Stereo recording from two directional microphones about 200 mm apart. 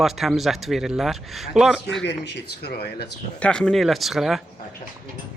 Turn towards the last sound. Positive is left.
turn(degrees=0)  # may be behind; listen again after turning